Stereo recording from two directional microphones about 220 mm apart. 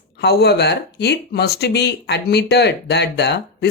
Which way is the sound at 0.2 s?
45° left (ahead or behind).